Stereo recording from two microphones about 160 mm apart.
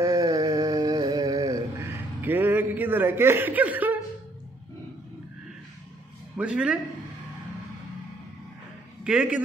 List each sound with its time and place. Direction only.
0.0 s a sound: 20° right (ahead or behind)
6.3 s a man's voice: 5° right (ahead or behind)
9.0 s a man's voice: 10° right (ahead or behind)